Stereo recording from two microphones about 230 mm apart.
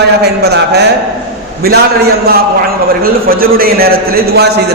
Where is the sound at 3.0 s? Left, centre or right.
Right.